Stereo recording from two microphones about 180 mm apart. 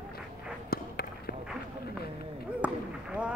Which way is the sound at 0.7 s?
60° left (ahead or behind).